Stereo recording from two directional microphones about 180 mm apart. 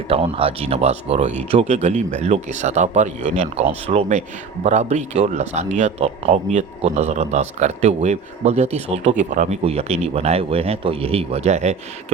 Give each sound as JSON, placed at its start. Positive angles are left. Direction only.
{"t": 0.1, "sound": "speech", "side_deg": -30}